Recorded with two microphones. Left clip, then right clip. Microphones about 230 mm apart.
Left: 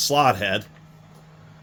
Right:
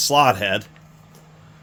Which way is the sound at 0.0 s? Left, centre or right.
Centre.